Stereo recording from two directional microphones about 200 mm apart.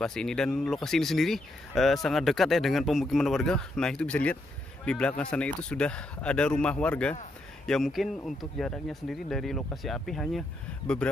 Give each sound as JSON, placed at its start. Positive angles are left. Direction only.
{"t": 0.0, "sound": "speech", "side_deg": 5}